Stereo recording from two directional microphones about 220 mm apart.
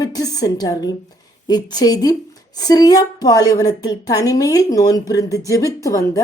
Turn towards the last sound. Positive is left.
turn(degrees=15)  # may be behind; listen again after turning